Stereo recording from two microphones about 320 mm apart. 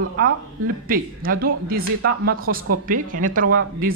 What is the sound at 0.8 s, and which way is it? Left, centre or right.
Speech, right.